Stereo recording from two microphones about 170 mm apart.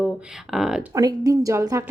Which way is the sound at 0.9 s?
20° right (ahead or behind).